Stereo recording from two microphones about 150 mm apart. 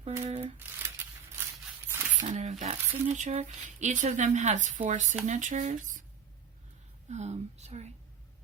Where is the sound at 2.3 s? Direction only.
50° right (ahead or behind).